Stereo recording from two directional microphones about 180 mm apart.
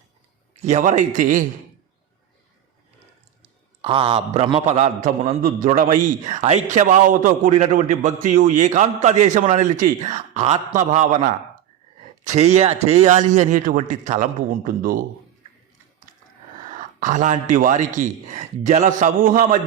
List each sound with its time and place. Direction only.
0.5 s a man's voice: 40° right (ahead or behind)
3.4 s a man's voice: 30° right (ahead or behind); by 15.0 s 50° right (ahead or behind)
16.7 s a man's voice: 45° right (ahead or behind)